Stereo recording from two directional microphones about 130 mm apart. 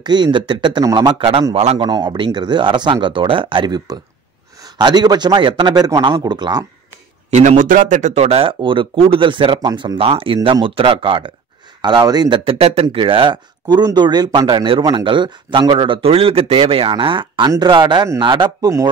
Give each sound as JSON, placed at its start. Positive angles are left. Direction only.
{"t": 0.0, "sound": "speech", "side_deg": -35}
{"t": 1.5, "sound": "a man's voice", "side_deg": -55}
{"t": 1.8, "sound": "speech", "side_deg": -35}
{"t": 7.2, "sound": "speech", "side_deg": -65}
{"t": 9.9, "sound": "speech", "side_deg": -45}
{"t": 12.4, "sound": "speech", "side_deg": -50}